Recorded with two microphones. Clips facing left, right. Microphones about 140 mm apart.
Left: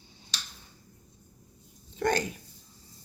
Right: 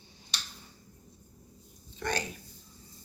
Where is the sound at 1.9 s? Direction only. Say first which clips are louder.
Left 7 dB; 50° left (ahead or behind).